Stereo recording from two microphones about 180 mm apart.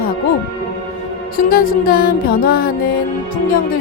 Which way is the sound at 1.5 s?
55° left (ahead or behind).